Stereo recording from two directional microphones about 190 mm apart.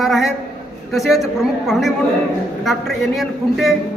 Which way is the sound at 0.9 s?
Centre (ahead or behind).